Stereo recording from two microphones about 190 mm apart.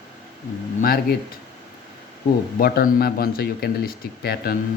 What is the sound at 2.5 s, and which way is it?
Speech, 50° left (ahead or behind).